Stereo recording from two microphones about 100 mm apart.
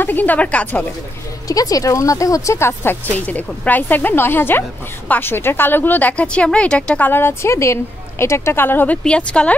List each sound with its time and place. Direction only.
0.0 s a woman's voice: 20° left (ahead or behind)
1.5 s a woman's voice: 35° left (ahead or behind); by 7.1 s 10° left (ahead or behind)
7.1 s a woman's voice: 25° left (ahead or behind)